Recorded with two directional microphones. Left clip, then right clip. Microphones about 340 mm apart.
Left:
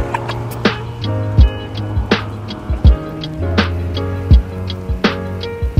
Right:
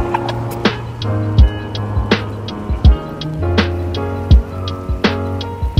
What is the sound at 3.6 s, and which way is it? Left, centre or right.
Music, centre.